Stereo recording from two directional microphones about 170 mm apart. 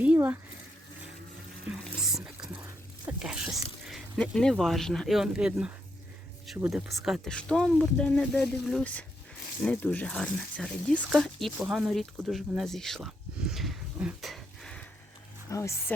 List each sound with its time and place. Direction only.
0.0 s speech: 10° right (ahead or behind)
1.7 s speech: 5° right (ahead or behind)
13.5 s a sound: centre (ahead or behind)
15.4 s speech: 20° left (ahead or behind)